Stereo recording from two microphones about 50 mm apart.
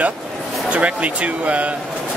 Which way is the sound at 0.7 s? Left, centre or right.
Right.